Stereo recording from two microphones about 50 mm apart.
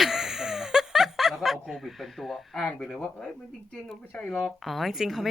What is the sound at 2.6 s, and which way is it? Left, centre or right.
Speech, centre.